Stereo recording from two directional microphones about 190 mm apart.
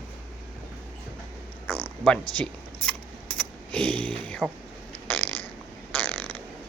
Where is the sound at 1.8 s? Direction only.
5° left (ahead or behind).